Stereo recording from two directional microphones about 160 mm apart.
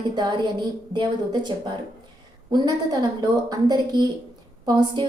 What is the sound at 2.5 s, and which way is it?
A woman's voice, 25° right (ahead or behind).